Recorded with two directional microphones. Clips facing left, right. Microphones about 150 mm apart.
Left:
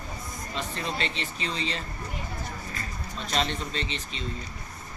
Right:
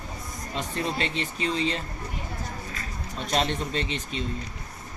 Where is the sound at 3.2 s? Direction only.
45° right (ahead or behind).